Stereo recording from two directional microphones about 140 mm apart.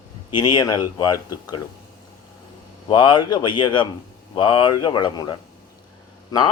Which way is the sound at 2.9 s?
30° left (ahead or behind).